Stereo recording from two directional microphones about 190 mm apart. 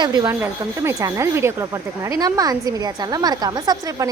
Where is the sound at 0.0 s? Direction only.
20° right (ahead or behind).